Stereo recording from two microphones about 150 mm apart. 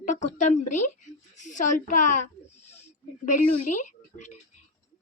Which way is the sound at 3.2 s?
60° left (ahead or behind).